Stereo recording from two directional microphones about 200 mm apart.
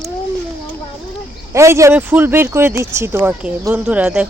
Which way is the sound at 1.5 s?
15° right (ahead or behind).